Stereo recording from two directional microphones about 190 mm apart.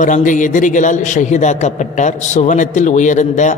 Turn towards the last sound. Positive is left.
turn(degrees=40)  # may be behind; listen again after turning